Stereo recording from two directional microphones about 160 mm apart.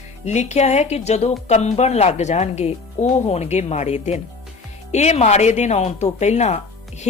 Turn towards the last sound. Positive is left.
turn(degrees=45)  # may be behind; listen again after turning